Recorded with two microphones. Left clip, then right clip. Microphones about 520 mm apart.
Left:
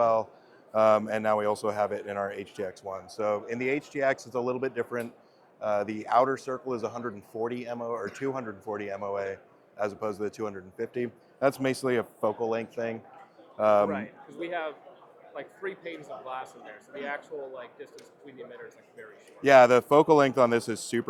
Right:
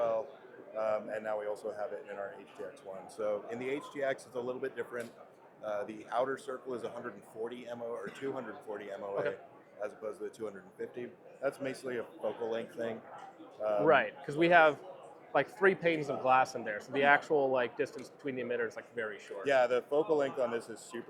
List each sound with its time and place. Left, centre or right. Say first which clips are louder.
0.0 s a man's voice: left 8 dB; left
0.8 s speech: left 11 dB; left
3.2 s a man's voice: left 6 dB; left
13.6 s speech: left 10 dB; left
13.9 s speech: right 8 dB; right
19.4 s speech: left 11 dB; left